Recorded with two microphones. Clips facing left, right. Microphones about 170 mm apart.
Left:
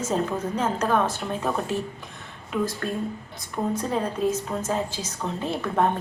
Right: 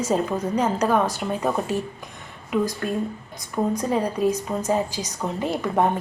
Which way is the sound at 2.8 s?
15° right (ahead or behind).